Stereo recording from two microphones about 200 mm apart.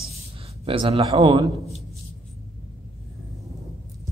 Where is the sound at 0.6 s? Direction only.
30° right (ahead or behind).